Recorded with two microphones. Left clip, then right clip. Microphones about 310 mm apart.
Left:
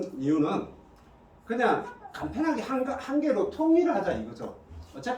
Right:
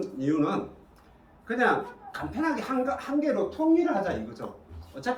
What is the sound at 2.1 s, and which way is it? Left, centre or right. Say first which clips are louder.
Speech: left 1 dB; centre.